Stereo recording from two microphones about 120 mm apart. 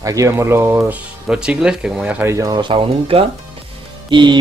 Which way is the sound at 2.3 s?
30° right (ahead or behind).